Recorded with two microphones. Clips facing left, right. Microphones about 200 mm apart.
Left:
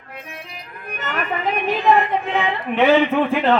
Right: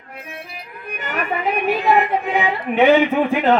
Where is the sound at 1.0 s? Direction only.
10° right (ahead or behind).